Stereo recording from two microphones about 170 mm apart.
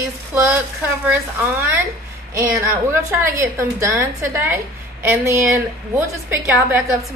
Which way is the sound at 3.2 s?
15° right (ahead or behind).